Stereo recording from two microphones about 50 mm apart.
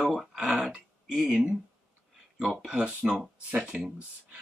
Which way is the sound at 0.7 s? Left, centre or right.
Right.